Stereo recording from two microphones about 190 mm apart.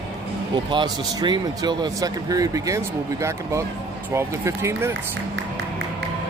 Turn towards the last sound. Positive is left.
turn(degrees=-15)  # may be behind; listen again after turning